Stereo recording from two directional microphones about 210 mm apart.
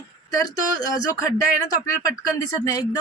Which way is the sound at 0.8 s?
15° left (ahead or behind).